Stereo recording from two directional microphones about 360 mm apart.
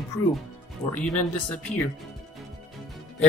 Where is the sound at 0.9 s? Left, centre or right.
Centre.